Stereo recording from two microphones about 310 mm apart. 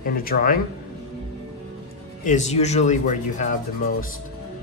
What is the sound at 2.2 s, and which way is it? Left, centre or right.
Speech, left.